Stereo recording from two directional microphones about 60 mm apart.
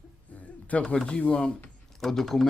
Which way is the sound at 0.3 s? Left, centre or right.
Left.